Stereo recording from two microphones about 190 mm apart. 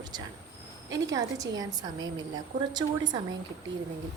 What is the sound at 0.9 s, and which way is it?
A woman's voice, 20° right (ahead or behind).